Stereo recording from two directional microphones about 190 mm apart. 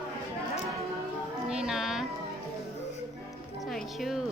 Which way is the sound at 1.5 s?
5° right (ahead or behind).